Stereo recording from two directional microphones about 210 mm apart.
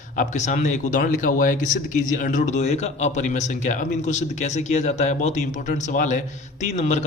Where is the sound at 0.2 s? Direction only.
35° left (ahead or behind).